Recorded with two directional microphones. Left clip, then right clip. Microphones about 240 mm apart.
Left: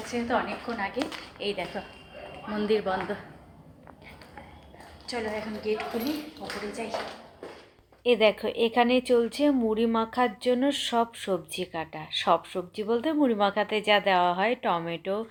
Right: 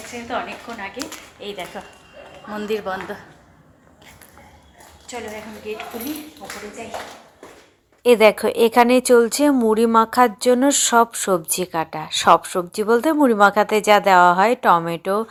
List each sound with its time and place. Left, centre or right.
1.4 s a woman's voice: centre
5.0 s a woman's voice: centre
8.0 s speech: right